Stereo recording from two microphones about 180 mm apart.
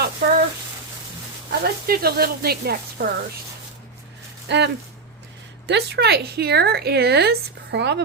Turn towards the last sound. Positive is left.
turn(degrees=-70)  # may be behind; listen again after turning